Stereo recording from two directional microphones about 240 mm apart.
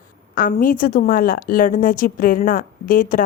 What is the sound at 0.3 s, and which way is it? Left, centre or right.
A woman's voice, left.